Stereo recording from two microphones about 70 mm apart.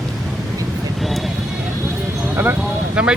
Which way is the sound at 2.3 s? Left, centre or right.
Right.